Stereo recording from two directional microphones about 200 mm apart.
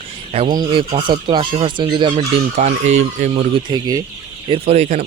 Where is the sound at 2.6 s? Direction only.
35° right (ahead or behind).